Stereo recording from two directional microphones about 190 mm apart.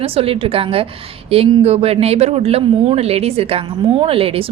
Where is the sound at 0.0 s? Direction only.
30° right (ahead or behind).